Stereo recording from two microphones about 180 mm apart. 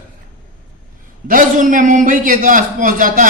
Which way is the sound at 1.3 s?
45° right (ahead or behind).